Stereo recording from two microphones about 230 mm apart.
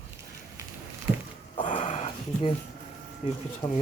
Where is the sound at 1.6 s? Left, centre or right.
Left.